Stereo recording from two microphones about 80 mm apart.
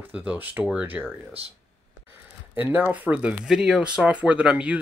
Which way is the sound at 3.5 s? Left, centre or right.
Centre.